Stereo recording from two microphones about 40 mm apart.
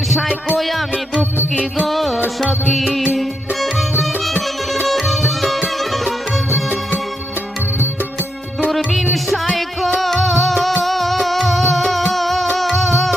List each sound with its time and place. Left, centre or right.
0.5 s music: centre
8.7 s music: centre